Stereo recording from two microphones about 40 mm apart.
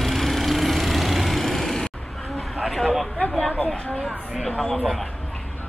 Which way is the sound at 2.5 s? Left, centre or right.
Centre.